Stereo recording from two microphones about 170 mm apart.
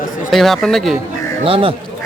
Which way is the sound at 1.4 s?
35° right (ahead or behind).